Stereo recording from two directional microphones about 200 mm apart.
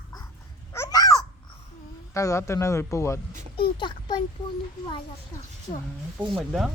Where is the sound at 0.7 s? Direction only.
15° left (ahead or behind).